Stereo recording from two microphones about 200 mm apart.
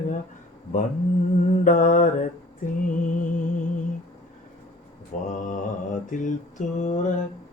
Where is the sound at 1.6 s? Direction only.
40° left (ahead or behind).